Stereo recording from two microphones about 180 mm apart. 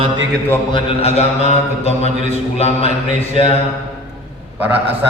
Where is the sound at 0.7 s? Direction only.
30° left (ahead or behind).